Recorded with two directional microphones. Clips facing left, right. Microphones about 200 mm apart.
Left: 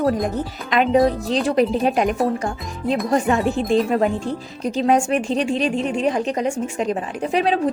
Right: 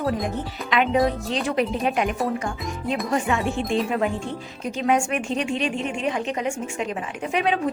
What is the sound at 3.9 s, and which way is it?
A woman's voice, 40° left (ahead or behind).